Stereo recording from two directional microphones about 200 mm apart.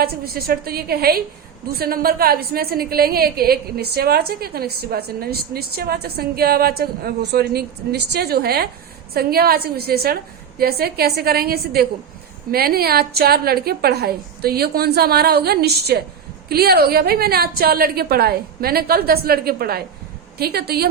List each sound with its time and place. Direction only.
0.0 s a woman's voice: 50° right (ahead or behind)